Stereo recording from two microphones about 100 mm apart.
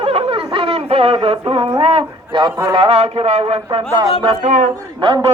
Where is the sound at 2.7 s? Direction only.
80° right.